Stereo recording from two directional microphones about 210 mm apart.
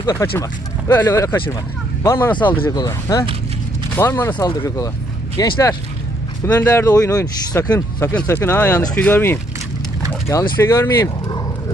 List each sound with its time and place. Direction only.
0.0 s speech: 20° left (ahead or behind)
10.1 s a sound: 15° left (ahead or behind)
10.6 s speech: 10° left (ahead or behind)